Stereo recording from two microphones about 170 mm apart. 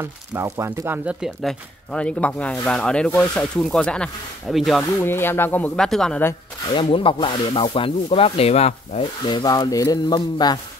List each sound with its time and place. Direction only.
0.0 s speech: 15° right (ahead or behind)
4.9 s speech: 15° left (ahead or behind)
6.7 s speech: 30° left (ahead or behind)